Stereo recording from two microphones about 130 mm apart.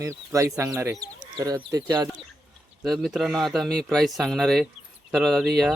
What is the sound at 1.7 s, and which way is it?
Speech, 15° right (ahead or behind).